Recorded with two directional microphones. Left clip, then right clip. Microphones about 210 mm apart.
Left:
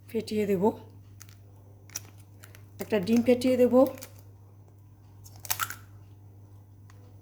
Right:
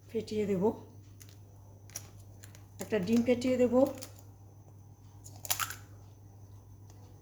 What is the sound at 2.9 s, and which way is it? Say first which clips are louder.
Speech: left 5 dB; 55° left (ahead or behind).